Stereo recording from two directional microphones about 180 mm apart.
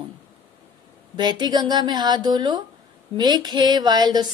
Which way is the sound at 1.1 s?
25° right (ahead or behind).